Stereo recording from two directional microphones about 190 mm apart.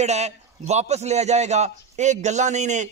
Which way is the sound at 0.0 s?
35° right (ahead or behind).